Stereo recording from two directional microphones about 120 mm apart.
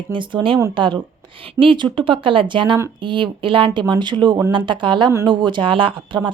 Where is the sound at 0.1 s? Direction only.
40° right (ahead or behind).